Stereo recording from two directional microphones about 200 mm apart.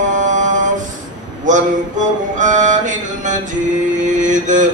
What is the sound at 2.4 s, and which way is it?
Mantra, 40° right (ahead or behind).